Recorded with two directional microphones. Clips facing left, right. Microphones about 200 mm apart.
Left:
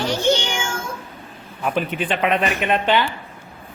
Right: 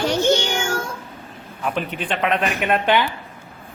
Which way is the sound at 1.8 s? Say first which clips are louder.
Left 3 dB; 5° left (ahead or behind).